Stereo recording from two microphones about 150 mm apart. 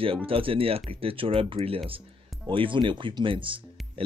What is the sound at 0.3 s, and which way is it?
Speech, 40° right (ahead or behind).